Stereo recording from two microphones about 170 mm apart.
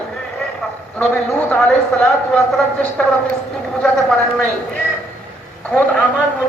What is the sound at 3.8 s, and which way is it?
A woman's voice, 5° left (ahead or behind).